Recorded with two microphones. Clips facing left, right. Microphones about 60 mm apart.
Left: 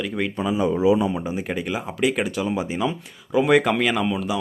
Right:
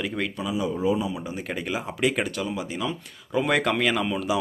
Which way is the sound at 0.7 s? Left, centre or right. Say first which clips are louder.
Left 6 dB; left.